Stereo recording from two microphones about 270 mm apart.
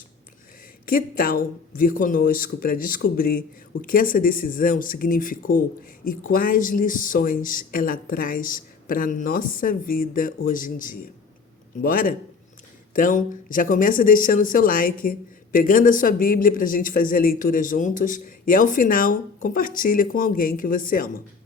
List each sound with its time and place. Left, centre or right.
0.9 s speech: left